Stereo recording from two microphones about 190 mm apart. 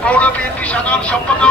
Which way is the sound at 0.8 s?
5° left (ahead or behind).